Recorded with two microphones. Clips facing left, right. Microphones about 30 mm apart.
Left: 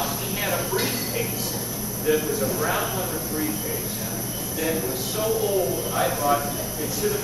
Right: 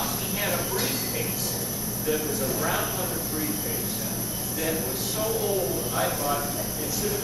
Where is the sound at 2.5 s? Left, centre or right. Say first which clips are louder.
Left 2 dB; centre.